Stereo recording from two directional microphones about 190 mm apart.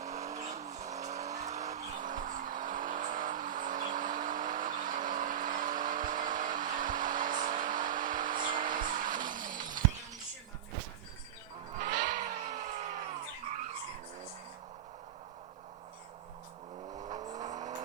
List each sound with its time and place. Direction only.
0.1 s vehicle: 40° right (ahead or behind)
9.5 s shatter: 45° right (ahead or behind)
11.8 s music: 55° right (ahead or behind)
12.0 s music: 40° right (ahead or behind)
17.2 s vehicle: 40° right (ahead or behind)